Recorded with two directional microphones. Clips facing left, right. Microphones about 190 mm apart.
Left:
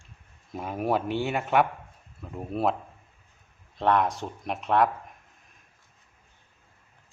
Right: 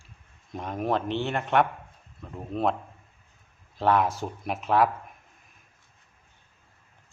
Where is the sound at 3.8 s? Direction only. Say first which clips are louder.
Right 1 dB; centre (ahead or behind).